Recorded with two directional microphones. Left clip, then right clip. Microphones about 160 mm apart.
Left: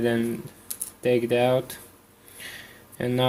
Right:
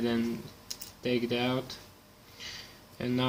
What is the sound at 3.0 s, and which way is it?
Speech, 35° left (ahead or behind).